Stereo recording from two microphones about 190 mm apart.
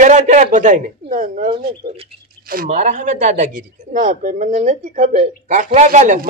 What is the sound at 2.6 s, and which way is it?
Chopping, 40° right (ahead or behind).